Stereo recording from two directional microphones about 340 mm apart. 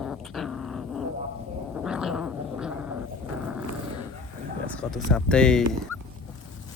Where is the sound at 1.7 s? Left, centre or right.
Centre.